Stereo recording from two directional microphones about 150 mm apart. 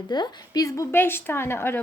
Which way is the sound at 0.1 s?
25° left (ahead or behind).